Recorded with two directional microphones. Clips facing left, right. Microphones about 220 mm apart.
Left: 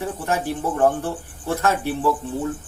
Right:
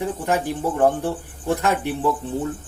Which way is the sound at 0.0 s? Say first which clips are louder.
Right 2 dB; 15° right (ahead or behind).